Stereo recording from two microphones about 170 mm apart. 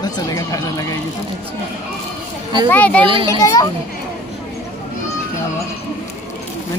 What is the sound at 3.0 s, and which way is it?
Speech, 30° right (ahead or behind).